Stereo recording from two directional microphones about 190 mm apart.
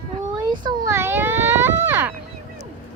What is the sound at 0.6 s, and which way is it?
Speech, 15° right (ahead or behind).